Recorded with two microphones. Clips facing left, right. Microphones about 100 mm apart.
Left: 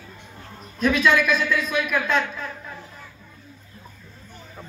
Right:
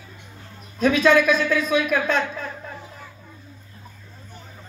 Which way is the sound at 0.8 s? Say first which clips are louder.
Right 3 dB; 40° right (ahead or behind).